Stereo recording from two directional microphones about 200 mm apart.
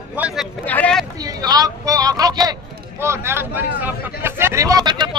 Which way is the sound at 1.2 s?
20° right (ahead or behind).